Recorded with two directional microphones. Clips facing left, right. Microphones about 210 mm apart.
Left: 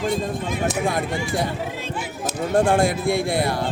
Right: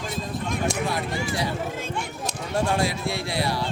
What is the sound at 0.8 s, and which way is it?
Speech, 50° left (ahead or behind).